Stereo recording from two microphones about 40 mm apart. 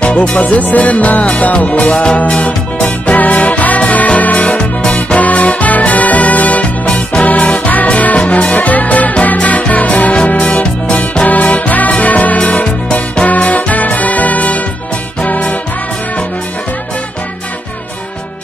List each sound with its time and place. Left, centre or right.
0.0 s music: left
3.2 s music: left
6.9 s music: left
11.2 s music: left